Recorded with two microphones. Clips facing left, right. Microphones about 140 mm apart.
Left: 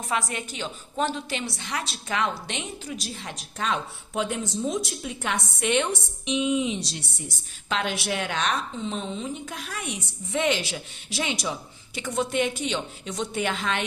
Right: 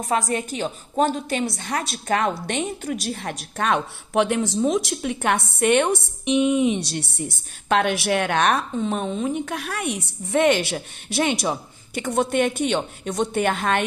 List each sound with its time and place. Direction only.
0.0 s a woman's voice: 40° right (ahead or behind); by 3.3 s 55° right (ahead or behind)
3.6 s a woman's voice: 65° right (ahead or behind)